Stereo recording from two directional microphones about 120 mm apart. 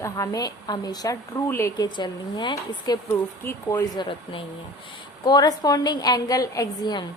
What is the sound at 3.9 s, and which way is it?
Speech, 45° left (ahead or behind).